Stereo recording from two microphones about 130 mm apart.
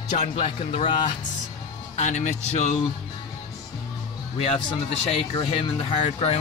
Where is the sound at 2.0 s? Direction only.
70° left (ahead or behind).